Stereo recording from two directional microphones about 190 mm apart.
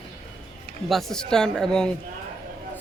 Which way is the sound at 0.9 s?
Centre (ahead or behind).